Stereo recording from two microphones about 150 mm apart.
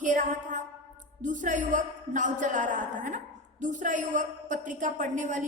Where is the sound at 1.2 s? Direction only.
60° right (ahead or behind).